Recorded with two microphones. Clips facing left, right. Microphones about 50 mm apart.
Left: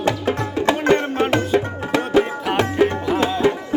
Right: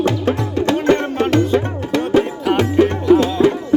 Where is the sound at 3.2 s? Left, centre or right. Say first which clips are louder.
Right 3 dB; centre.